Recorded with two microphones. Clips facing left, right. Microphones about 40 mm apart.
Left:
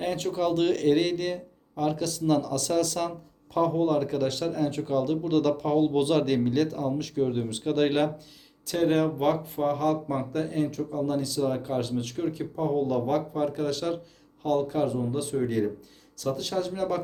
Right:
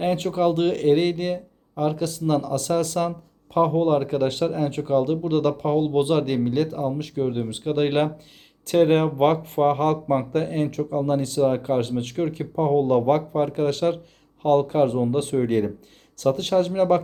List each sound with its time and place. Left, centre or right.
0.0 s a man's voice: right; by 7.9 s centre
8.6 s speech: right